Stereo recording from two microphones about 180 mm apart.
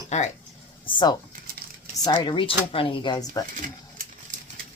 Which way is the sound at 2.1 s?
25° left (ahead or behind).